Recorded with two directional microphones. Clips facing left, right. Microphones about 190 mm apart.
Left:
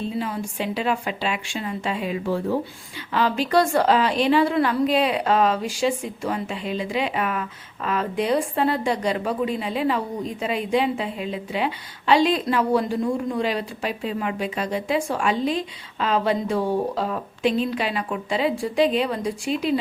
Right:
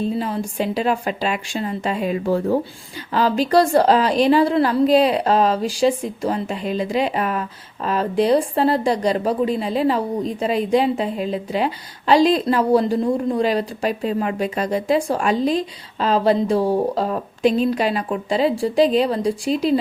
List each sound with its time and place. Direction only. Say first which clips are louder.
0.0 s a woman's voice: right 4 dB; 40° right (ahead or behind)